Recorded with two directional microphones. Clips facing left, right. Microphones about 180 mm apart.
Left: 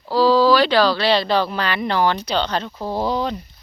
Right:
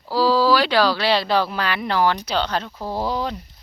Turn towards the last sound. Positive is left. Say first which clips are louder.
# left 3 dB
turn(degrees=-5)  # may be behind; listen again after turning